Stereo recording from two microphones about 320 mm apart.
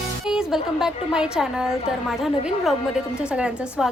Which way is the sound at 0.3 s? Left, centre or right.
Centre.